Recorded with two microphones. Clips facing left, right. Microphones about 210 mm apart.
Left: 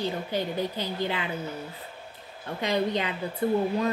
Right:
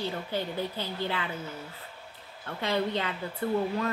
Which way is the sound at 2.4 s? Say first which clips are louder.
Left 3 dB; 15° left (ahead or behind).